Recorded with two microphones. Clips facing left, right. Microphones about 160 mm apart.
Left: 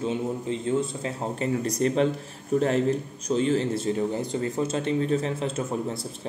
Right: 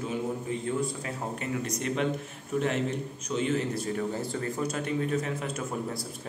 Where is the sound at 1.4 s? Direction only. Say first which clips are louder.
Left 10 dB; 35° left (ahead or behind).